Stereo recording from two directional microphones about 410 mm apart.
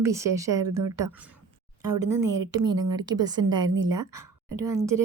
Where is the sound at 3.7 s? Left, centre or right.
Right.